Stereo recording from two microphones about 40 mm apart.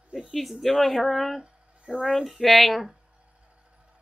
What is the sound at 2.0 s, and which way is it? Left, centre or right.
Speech, centre.